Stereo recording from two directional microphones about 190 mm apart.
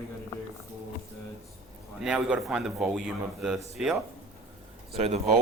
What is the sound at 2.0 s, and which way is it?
A man's voice, 5° right (ahead or behind).